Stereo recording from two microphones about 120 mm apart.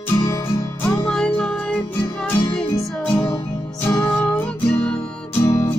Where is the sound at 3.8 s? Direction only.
20° left (ahead or behind).